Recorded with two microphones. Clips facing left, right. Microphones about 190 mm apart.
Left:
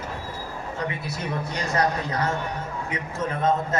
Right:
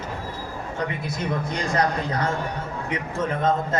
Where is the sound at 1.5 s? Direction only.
30° right (ahead or behind).